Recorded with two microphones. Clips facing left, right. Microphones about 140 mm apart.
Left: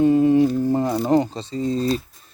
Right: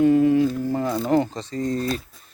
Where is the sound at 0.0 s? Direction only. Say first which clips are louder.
Left 1 dB; 25° left (ahead or behind).